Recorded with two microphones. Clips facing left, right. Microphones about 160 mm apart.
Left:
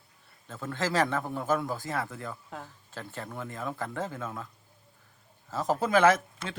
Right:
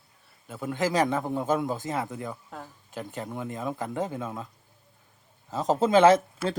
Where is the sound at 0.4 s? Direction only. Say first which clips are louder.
Right 4 dB; 10° right (ahead or behind).